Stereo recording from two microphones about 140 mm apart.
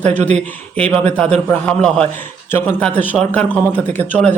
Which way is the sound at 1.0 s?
10° left (ahead or behind).